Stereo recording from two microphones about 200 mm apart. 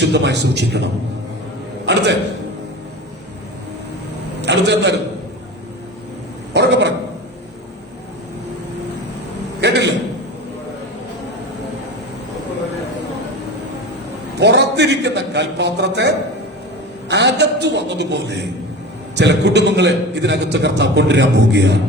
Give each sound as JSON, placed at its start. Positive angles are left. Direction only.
{"t": 0.0, "sound": "a man's voice", "side_deg": -60}
{"t": 1.9, "sound": "a man's voice", "side_deg": -60}
{"t": 4.4, "sound": "a man's voice", "side_deg": -60}
{"t": 6.5, "sound": "speech", "side_deg": -60}
{"t": 9.6, "sound": "a man's voice", "side_deg": -60}
{"t": 14.3, "sound": "a man's voice", "side_deg": -60}